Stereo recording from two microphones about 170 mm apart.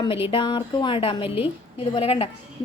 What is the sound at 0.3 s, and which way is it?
A woman's voice, 30° left (ahead or behind).